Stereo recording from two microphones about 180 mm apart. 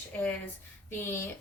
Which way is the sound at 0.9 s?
10° left (ahead or behind).